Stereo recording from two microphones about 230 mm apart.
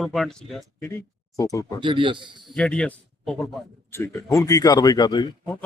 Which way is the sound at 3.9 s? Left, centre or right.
Centre.